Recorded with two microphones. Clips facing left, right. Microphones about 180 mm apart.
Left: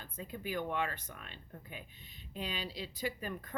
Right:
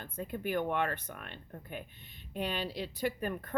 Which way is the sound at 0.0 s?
55° right (ahead or behind).